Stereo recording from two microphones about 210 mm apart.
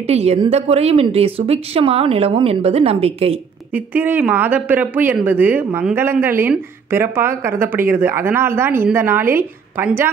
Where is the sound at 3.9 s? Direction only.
10° right (ahead or behind).